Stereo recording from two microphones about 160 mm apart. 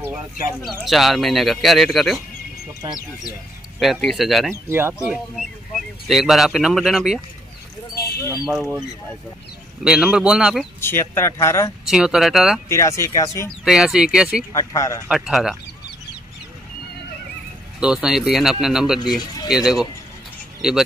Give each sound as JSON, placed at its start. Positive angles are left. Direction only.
{"t": 0.8, "sound": "speech", "side_deg": 0}
{"t": 3.8, "sound": "speech", "side_deg": 0}
{"t": 4.6, "sound": "speech", "side_deg": -15}
{"t": 5.0, "sound": "speech", "side_deg": -5}
{"t": 7.9, "sound": "a sound", "side_deg": 75}
{"t": 8.5, "sound": "speech", "side_deg": -5}
{"t": 9.8, "sound": "speech", "side_deg": -5}
{"t": 10.8, "sound": "speech", "side_deg": 15}
{"t": 11.9, "sound": "speech", "side_deg": -5}
{"t": 12.6, "sound": "speech", "side_deg": 15}
{"t": 13.7, "sound": "speech", "side_deg": -5}
{"t": 14.5, "sound": "speech", "side_deg": 20}
{"t": 15.0, "sound": "speech", "side_deg": 0}
{"t": 17.7, "sound": "speech", "side_deg": -5}